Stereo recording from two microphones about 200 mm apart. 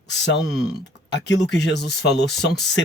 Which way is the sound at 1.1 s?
60° left (ahead or behind).